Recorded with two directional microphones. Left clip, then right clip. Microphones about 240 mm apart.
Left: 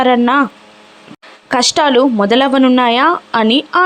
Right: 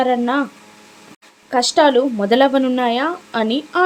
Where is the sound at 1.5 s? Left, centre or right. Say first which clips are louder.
Left 2 dB; centre.